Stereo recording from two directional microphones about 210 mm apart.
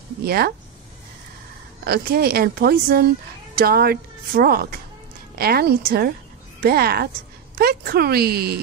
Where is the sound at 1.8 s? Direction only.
45° right (ahead or behind).